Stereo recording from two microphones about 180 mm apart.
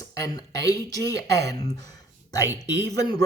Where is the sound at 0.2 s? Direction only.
20° left (ahead or behind).